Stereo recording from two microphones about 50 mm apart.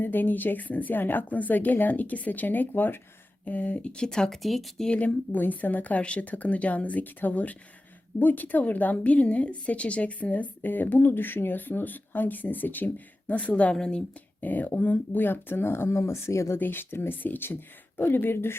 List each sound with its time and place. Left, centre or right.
0.0 s a woman's voice: left; by 4.4 s centre
4.4 s speech: centre
4.9 s a woman's voice: left
13.7 s speech: centre
14.4 s a woman's voice: left
16.6 s speech: left